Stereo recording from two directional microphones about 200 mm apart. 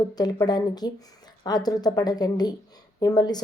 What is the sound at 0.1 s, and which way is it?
A woman's voice, 20° left (ahead or behind).